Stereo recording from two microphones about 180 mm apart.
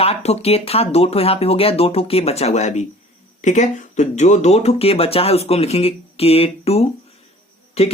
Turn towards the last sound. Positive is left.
turn(degrees=35)  # may be behind; listen again after turning